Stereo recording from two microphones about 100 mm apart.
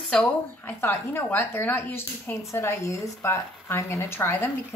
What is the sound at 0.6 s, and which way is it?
A woman's voice, 20° left (ahead or behind).